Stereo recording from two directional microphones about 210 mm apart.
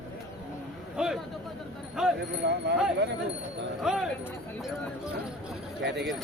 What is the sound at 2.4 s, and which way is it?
Wind chime, 55° right (ahead or behind).